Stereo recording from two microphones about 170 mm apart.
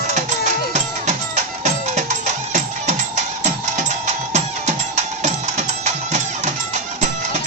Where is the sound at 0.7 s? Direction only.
40° right (ahead or behind).